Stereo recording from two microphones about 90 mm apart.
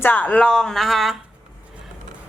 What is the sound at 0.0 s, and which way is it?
A woman's voice, 20° left (ahead or behind).